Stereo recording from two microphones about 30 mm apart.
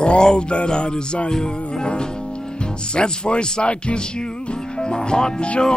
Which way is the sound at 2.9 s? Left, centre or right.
Left.